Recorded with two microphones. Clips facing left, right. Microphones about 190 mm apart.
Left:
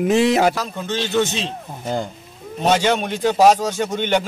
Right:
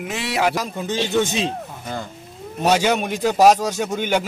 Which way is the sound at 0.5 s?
15° right (ahead or behind).